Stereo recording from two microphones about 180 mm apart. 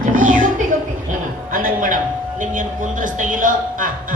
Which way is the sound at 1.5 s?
50° right (ahead or behind).